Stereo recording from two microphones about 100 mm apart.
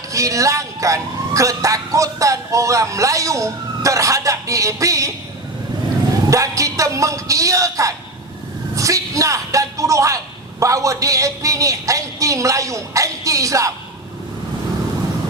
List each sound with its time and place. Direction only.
0.1 s speech: 35° right (ahead or behind)
6.3 s a man's voice: 35° right (ahead or behind)